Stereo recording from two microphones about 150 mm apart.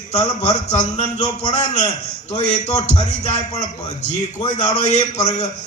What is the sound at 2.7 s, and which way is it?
Speech, 35° left (ahead or behind).